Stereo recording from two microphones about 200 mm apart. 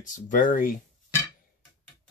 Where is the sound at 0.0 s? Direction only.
40° left (ahead or behind).